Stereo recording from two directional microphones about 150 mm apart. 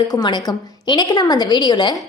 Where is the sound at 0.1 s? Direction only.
25° left (ahead or behind).